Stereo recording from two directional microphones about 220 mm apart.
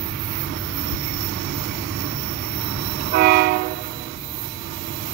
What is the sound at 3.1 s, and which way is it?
Train, 40° right (ahead or behind).